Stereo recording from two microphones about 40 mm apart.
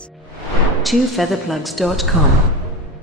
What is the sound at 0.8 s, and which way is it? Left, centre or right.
Speech, centre.